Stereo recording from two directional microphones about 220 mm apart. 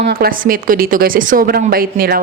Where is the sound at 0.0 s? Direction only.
45° right (ahead or behind).